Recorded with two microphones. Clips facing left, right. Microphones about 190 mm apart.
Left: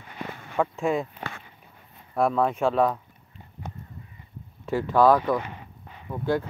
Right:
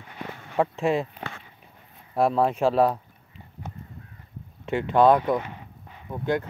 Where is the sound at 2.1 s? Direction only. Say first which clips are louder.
Right 1 dB; 30° right (ahead or behind).